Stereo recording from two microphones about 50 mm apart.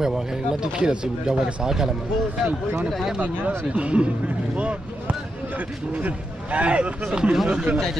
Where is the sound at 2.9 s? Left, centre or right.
Centre.